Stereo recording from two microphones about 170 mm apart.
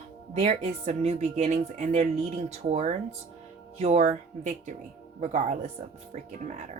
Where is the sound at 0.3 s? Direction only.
40° right (ahead or behind).